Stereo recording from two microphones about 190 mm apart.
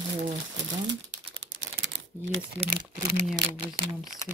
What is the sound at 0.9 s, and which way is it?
Typing, 80° right.